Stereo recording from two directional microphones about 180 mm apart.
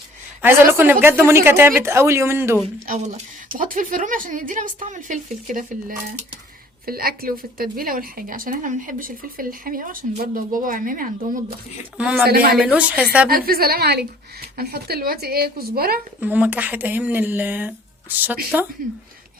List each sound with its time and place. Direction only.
0.4 s a woman's voice: 10° right (ahead or behind)
2.9 s a woman's voice: 40° right (ahead or behind)
6.8 s a woman's voice: 55° right (ahead or behind)
11.9 s speech: 5° right (ahead or behind)
12.2 s speech: 60° right (ahead or behind)
12.5 s a woman's voice: 5° right (ahead or behind)
13.2 s speech: 55° right (ahead or behind)
16.2 s a woman's voice: 10° right (ahead or behind)